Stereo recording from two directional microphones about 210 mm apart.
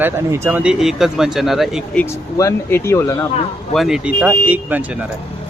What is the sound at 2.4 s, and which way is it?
Speech, 10° left (ahead or behind).